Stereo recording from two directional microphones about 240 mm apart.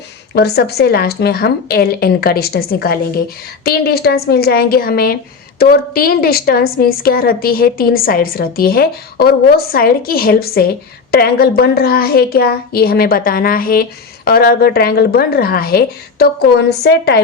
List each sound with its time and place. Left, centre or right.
0.3 s a woman's voice: left